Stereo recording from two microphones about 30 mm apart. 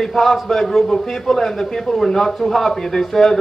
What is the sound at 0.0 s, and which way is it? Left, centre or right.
A man's voice, centre.